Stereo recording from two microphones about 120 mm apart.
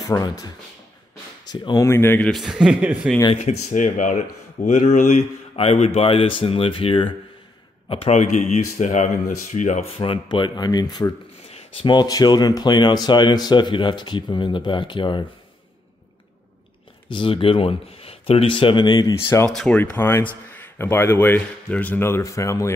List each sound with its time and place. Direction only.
0.0 s speech: 35° left (ahead or behind)
1.5 s speech: 35° left (ahead or behind)
1.9 s speech: 20° left (ahead or behind)
2.3 s a man's voice: 5° right (ahead or behind)
3.3 s speech: 80° left
5.6 s speech: 55° left (ahead or behind)
8.1 s speech: 70° left (ahead or behind)
8.7 s speech: 90° left; by 9.8 s 75° left (ahead or behind)
9.9 s speech: 45° left (ahead or behind)
17.1 s speech: 45° left (ahead or behind)
19.2 s speech: 25° left (ahead or behind)
19.5 s speech: 5° left (ahead or behind)
19.8 s speech: 20° left (ahead or behind)